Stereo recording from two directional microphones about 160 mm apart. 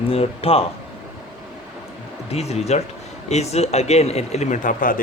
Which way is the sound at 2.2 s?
40° left (ahead or behind).